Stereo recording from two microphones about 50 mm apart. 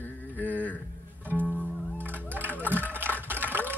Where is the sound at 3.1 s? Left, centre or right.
Right.